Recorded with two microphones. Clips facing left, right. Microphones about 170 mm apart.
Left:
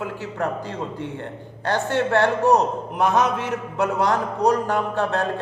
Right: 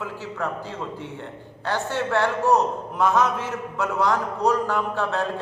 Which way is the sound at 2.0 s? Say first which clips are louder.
Left 4 dB; 60° left (ahead or behind).